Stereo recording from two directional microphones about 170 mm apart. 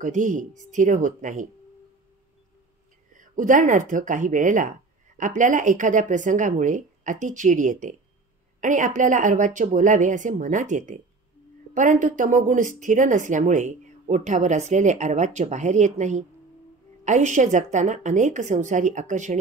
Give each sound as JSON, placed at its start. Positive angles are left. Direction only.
{"t": 0.0, "sound": "speech", "side_deg": -50}
{"t": 3.2, "sound": "speech", "side_deg": -50}